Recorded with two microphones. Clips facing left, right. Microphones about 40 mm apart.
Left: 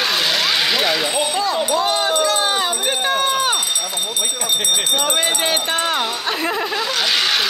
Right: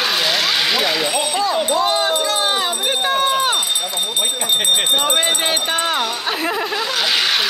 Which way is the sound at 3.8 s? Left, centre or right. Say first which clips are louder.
Right 2 dB; right.